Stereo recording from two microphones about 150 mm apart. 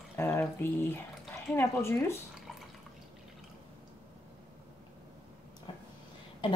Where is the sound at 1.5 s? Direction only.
15° left (ahead or behind).